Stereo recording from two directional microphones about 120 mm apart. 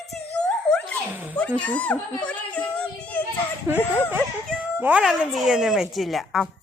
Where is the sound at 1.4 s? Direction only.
10° left (ahead or behind).